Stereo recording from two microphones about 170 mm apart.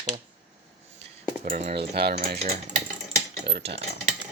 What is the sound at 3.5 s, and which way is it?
Cutlery, 75° right (ahead or behind).